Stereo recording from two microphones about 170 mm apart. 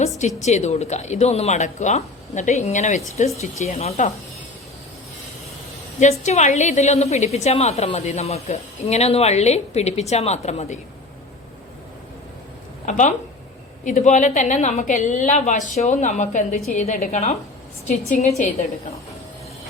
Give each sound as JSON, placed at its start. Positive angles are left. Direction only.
{"t": 0.4, "sound": "a woman's voice", "side_deg": 40}
{"t": 6.0, "sound": "a woman's voice", "side_deg": 45}
{"t": 12.8, "sound": "a woman's voice", "side_deg": 45}